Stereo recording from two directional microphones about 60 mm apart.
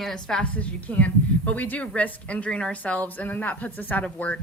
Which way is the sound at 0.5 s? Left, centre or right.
Left.